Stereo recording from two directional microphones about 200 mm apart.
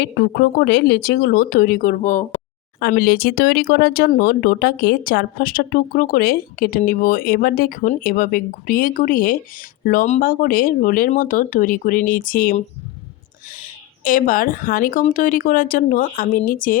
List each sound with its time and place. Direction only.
0.0 s speech: 55° left (ahead or behind)